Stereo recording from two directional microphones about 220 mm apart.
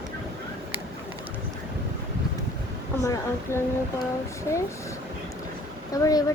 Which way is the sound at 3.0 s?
10° left (ahead or behind).